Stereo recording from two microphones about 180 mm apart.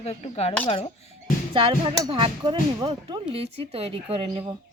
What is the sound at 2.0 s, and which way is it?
Speech, 25° right (ahead or behind).